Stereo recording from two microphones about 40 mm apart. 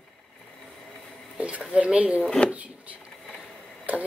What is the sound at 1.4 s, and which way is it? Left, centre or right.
Speech, right.